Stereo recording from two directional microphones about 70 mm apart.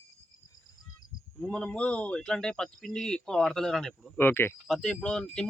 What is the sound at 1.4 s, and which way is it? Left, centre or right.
Speech, centre.